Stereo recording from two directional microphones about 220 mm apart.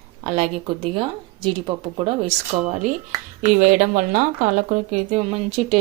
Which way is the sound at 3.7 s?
35° right (ahead or behind).